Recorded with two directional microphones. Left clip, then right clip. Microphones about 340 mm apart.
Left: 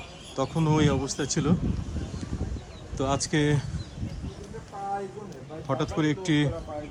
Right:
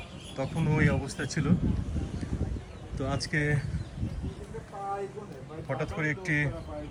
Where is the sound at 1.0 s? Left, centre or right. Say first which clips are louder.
Left 4 dB; centre.